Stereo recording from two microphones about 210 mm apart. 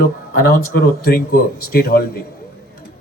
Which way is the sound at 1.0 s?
45° left (ahead or behind).